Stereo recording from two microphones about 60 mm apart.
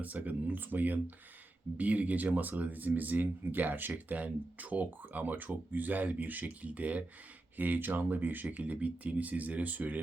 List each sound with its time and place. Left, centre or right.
0.0 s speech: right